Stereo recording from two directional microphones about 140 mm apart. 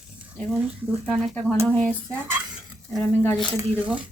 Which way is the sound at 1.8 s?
10° left (ahead or behind).